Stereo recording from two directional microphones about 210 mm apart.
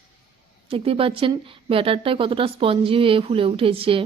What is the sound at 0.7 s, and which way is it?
A woman's voice, 25° right (ahead or behind).